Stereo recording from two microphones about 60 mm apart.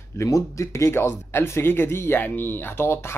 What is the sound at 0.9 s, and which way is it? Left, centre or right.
Speech, left.